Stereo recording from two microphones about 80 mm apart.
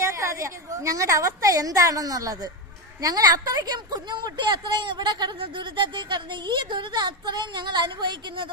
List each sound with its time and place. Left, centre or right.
0.0 s a woman's voice: right